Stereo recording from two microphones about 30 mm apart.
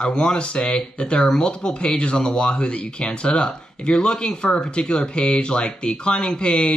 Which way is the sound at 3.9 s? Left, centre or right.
Centre.